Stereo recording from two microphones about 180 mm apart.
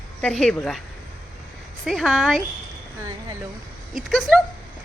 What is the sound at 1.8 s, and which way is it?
Speech, centre (ahead or behind).